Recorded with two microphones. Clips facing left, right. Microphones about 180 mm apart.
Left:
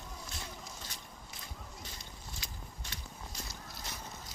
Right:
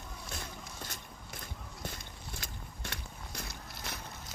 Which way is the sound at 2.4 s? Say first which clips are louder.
Right 3 dB; 60° right (ahead or behind).